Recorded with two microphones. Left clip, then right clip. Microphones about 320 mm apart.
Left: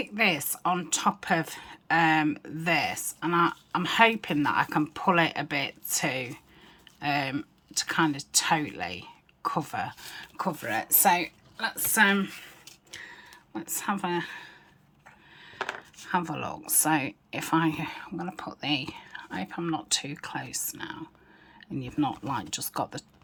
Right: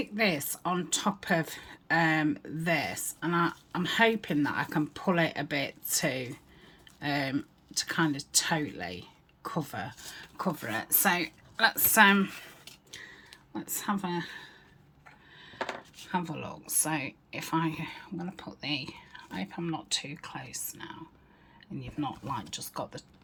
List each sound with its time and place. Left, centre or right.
0.0 s speech: centre
16.0 s speech: centre